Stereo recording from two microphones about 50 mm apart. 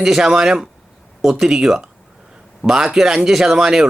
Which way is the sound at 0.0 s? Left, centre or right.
Centre.